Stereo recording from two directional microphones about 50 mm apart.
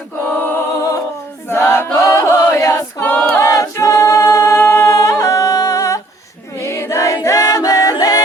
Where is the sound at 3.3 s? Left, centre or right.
Left.